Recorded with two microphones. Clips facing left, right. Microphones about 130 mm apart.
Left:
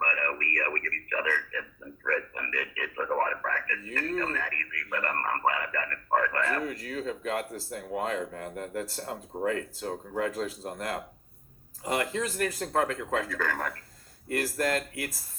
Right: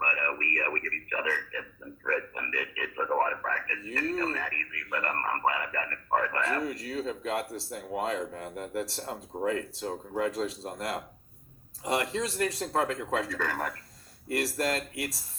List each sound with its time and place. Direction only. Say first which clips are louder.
0.0 s a man's voice: left 1 dB; 25° right (ahead or behind)